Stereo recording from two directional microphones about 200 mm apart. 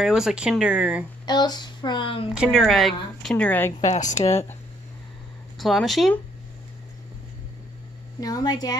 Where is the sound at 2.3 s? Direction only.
Centre (ahead or behind).